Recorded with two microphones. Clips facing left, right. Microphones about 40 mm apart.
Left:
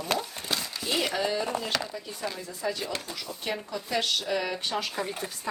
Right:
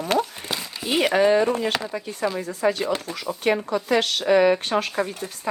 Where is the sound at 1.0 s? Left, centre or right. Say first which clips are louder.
Right 14 dB; right.